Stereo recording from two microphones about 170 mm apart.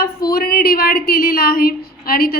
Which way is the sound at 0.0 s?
65° left (ahead or behind).